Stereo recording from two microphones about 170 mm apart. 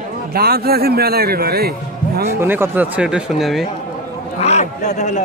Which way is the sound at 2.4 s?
10° right (ahead or behind).